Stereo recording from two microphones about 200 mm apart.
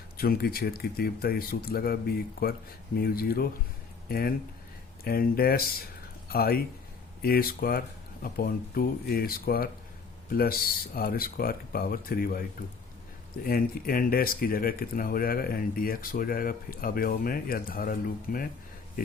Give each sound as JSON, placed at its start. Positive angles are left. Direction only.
{"t": 0.2, "sound": "speech", "side_deg": 50}